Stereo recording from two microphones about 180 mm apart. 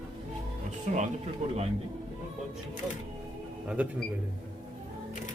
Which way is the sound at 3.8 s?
10° right (ahead or behind).